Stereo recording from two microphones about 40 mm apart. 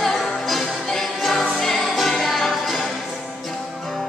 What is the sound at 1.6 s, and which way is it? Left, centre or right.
Music, centre.